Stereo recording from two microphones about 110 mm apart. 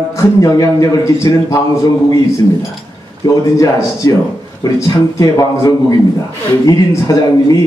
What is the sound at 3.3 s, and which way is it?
A man's voice, 30° left (ahead or behind).